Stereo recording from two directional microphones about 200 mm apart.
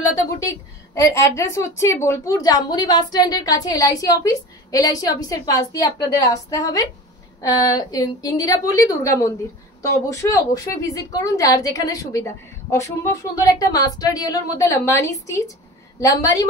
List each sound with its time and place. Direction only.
1.1 s a woman's voice: 15° left (ahead or behind)